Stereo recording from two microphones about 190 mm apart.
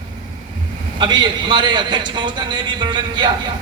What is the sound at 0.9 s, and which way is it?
A man's voice, 25° right (ahead or behind).